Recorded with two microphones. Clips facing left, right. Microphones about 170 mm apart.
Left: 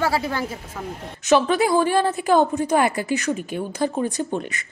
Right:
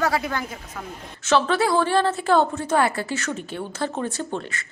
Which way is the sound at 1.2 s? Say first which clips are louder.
Left 2 dB; 15° left (ahead or behind).